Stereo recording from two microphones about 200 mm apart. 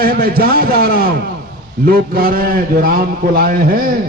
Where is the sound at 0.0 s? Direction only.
45° right (ahead or behind).